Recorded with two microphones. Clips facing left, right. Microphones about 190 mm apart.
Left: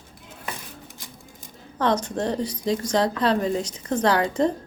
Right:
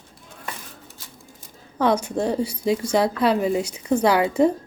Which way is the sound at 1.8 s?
10° right (ahead or behind).